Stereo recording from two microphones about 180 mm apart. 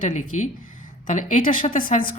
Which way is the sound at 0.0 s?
45° left (ahead or behind).